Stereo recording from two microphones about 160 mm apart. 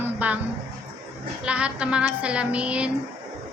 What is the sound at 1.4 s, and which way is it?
A woman's voice, 5° right (ahead or behind).